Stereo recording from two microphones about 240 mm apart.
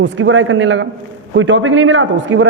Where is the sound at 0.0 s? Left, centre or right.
Right.